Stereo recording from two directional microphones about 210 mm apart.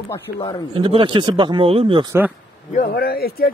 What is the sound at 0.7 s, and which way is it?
Speech, 25° right (ahead or behind).